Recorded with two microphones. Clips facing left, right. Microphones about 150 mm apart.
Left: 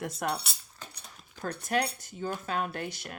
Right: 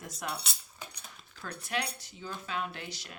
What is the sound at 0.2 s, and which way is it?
Speech, 55° left (ahead or behind).